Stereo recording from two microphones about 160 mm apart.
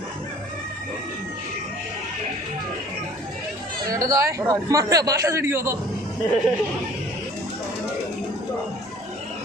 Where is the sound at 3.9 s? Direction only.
20° right (ahead or behind).